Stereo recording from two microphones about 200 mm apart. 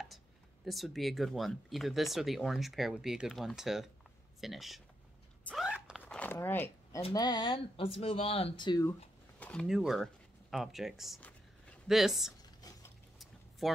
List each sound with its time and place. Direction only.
0.7 s speech: centre (ahead or behind)
5.4 s vehicle: 5° left (ahead or behind)
6.0 s a sound: 10° left (ahead or behind)
7.0 s speech: 25° left (ahead or behind)
9.4 s speech: 5° left (ahead or behind)
12.6 s a sound: 20° left (ahead or behind)
13.6 s speech: centre (ahead or behind)